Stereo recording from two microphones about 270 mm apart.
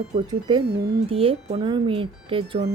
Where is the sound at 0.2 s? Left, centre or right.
Centre.